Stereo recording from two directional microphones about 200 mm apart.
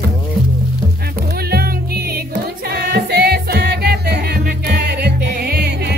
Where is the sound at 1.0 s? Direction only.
50° right (ahead or behind).